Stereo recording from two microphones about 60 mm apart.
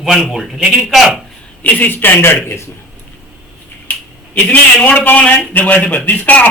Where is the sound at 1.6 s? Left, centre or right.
Left.